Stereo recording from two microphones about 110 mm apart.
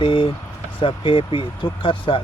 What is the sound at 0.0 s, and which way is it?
Speech, 55° left (ahead or behind).